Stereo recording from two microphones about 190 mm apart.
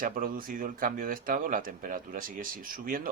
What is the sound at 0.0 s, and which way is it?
Speech, 50° right (ahead or behind).